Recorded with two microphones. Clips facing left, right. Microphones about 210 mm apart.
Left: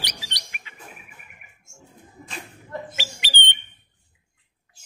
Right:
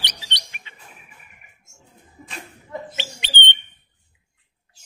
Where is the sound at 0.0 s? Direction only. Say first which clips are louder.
Even; 25° right (ahead or behind).